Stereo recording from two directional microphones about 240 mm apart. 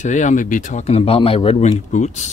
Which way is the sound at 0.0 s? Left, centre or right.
Left.